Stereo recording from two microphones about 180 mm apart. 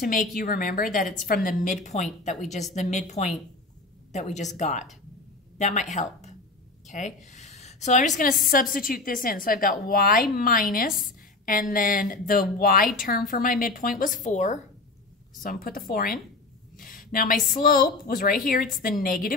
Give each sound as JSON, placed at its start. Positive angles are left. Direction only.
{"t": 0.0, "sound": "a woman's voice", "side_deg": 50}
{"t": 15.4, "sound": "a woman's voice", "side_deg": 55}
{"t": 16.8, "sound": "a sound", "side_deg": 50}
{"t": 17.6, "sound": "a woman's voice", "side_deg": 50}